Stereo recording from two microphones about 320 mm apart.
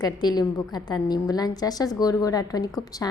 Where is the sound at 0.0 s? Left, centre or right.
Centre.